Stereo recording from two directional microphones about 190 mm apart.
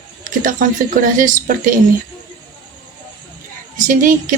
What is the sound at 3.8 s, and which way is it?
Speech, 45° right (ahead or behind).